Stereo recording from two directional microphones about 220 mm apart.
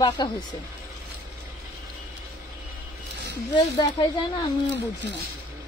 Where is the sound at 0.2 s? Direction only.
20° left (ahead or behind).